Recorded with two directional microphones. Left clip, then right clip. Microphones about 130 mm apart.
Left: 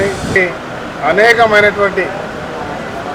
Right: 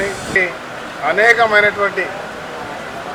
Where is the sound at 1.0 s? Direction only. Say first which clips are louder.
Left 3 dB; 15° left (ahead or behind).